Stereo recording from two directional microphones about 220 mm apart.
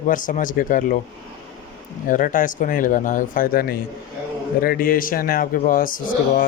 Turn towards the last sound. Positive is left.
turn(degrees=40)  # may be behind; listen again after turning